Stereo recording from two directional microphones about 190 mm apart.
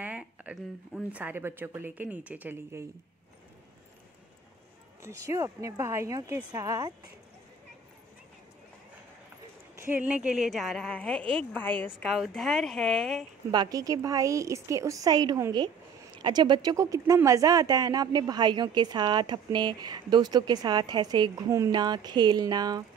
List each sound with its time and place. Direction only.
0.0 s speech: 10° right (ahead or behind)
5.0 s speech: 15° right (ahead or behind)
9.8 s a woman's voice: 10° right (ahead or behind)
13.5 s a woman's voice: 20° right (ahead or behind)